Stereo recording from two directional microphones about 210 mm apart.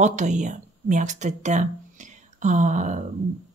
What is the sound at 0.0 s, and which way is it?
Speech, 35° right (ahead or behind).